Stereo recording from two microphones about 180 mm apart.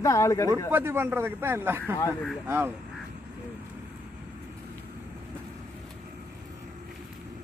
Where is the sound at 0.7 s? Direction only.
15° right (ahead or behind).